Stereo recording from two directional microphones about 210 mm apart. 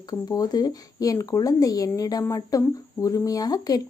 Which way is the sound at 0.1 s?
20° left (ahead or behind).